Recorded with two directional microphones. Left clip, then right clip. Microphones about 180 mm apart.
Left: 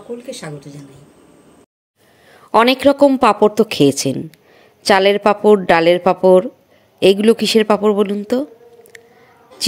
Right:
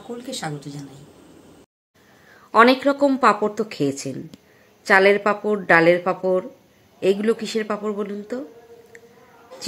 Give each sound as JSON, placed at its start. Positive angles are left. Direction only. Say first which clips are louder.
{"t": 0.3, "sound": "speech", "louder": "left 1 dB", "side_deg": -20}
{"t": 2.3, "sound": "a woman's voice", "louder": "left 2 dB", "side_deg": 35}